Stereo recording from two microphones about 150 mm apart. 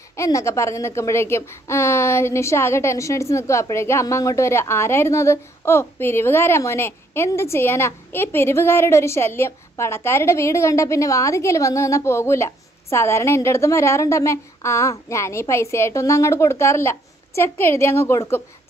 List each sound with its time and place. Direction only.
0.1 s speech: 20° left (ahead or behind)